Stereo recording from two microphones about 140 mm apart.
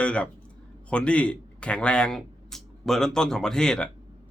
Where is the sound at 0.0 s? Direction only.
10° left (ahead or behind).